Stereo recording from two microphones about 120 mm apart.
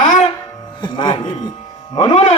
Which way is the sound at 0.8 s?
40° left (ahead or behind).